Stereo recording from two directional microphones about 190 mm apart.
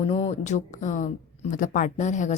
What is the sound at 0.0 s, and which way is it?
Speech, 30° left (ahead or behind).